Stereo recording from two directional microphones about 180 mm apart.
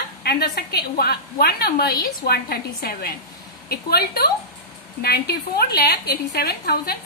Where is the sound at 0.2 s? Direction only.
65° left (ahead or behind).